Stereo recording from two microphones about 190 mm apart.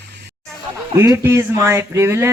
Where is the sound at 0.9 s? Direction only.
15° right (ahead or behind).